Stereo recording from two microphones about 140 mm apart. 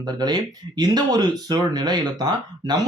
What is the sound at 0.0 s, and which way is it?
Speech, 30° right (ahead or behind).